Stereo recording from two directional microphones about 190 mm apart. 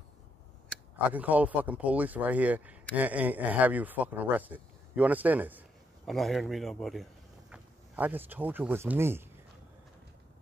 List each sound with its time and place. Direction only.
1.1 s speech: 10° right (ahead or behind)